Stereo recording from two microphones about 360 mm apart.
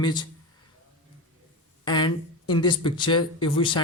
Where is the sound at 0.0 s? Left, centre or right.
Centre.